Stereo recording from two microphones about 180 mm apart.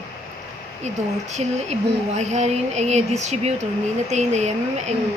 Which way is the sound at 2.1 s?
40° right (ahead or behind).